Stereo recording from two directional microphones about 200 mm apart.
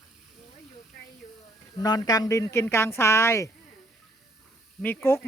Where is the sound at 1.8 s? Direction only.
20° left (ahead or behind).